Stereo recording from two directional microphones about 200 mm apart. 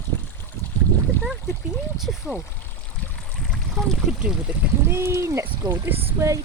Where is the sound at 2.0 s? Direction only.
5° right (ahead or behind).